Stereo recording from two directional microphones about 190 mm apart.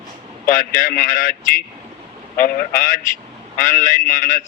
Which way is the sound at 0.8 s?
45° left (ahead or behind).